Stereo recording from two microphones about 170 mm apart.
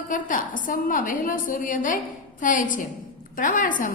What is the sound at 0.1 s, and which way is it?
A woman's voice, 50° left (ahead or behind).